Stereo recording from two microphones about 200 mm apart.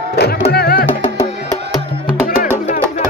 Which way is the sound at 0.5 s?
50° left (ahead or behind).